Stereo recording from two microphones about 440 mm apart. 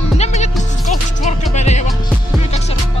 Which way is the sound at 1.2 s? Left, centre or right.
Centre.